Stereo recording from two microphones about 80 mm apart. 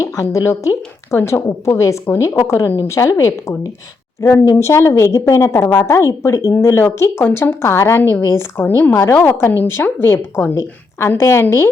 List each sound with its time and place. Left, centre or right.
0.0 s a woman's voice: left